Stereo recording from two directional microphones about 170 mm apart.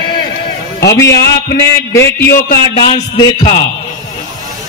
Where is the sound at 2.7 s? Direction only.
30° left (ahead or behind).